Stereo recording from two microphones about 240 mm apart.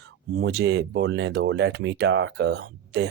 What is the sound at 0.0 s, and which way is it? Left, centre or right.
Speech, right.